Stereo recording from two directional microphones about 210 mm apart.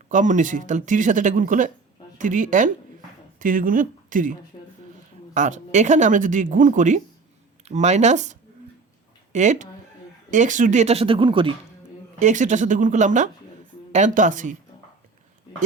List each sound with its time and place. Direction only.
0.1 s speech: 35° right (ahead or behind)
12.2 s speech: 35° right (ahead or behind)